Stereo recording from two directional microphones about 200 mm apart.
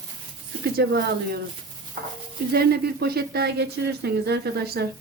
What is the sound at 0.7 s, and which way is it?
Speech, 50° right (ahead or behind).